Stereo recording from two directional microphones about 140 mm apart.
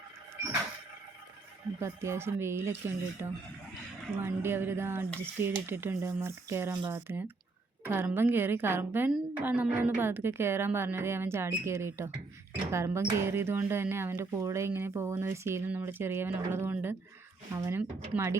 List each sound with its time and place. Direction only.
1.8 s a woman's voice: 20° right (ahead or behind)